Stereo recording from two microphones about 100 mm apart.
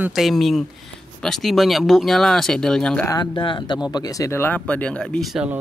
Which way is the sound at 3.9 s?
40° left (ahead or behind).